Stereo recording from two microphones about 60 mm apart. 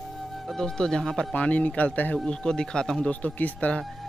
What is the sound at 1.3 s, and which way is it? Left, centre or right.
Speech, left.